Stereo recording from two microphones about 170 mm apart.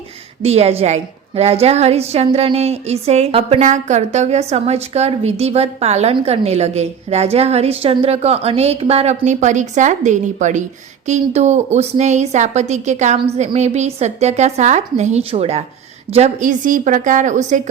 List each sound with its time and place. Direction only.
0.4 s a woman's voice: 35° right (ahead or behind)